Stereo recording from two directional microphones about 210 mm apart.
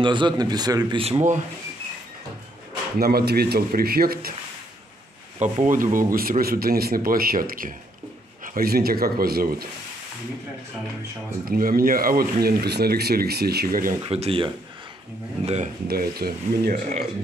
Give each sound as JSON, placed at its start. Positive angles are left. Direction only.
{"t": 0.0, "sound": "speech", "side_deg": -20}
{"t": 3.0, "sound": "speech", "side_deg": -45}
{"t": 5.4, "sound": "speech", "side_deg": -35}
{"t": 11.4, "sound": "speech", "side_deg": -45}
{"t": 14.0, "sound": "speech", "side_deg": -30}
{"t": 15.9, "sound": "speech", "side_deg": -45}